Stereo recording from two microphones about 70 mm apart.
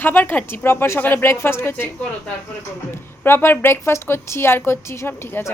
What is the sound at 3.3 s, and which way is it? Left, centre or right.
A woman's voice, left.